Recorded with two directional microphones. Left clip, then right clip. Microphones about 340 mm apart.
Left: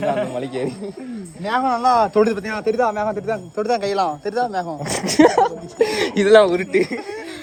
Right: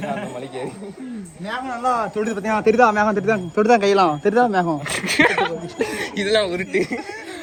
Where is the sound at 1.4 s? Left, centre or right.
Left.